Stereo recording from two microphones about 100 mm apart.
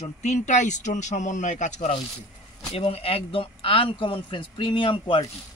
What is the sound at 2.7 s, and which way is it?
Speech, 75° left (ahead or behind).